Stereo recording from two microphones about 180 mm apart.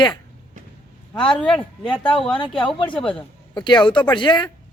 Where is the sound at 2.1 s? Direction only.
5° left (ahead or behind).